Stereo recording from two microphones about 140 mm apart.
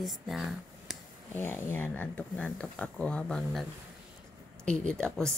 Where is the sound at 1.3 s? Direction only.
15° left (ahead or behind).